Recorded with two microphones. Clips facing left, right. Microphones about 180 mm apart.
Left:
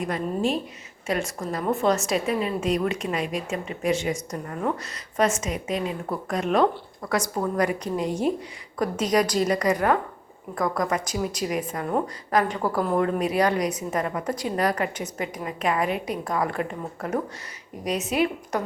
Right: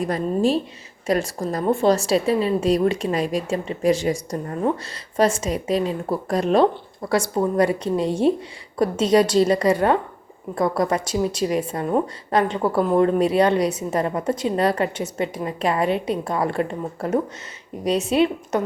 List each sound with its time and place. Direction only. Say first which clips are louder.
0.0 s a woman's voice: right 5 dB; 35° right (ahead or behind)